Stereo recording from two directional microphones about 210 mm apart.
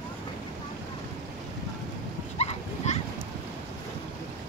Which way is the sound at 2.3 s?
30° left (ahead or behind).